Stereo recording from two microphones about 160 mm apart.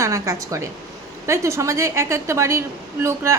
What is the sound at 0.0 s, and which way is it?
A woman's voice, 20° right (ahead or behind).